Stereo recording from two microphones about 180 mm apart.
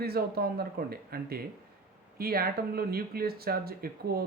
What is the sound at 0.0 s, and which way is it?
Speech, 60° right (ahead or behind).